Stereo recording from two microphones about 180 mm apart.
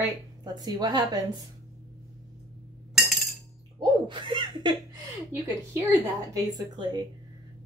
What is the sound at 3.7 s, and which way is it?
A woman's voice, 25° right (ahead or behind).